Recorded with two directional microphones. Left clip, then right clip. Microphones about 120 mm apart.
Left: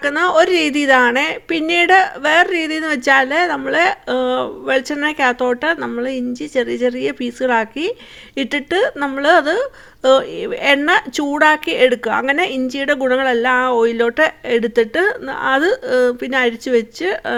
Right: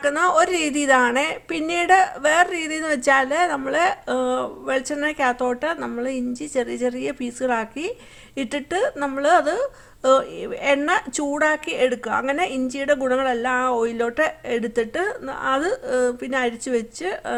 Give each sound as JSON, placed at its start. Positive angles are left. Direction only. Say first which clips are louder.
{"t": 0.0, "sound": "a woman's voice", "louder": "left 4 dB", "side_deg": 30}